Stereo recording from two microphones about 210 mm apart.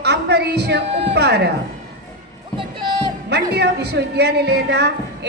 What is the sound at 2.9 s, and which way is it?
Speech, 50° right (ahead or behind).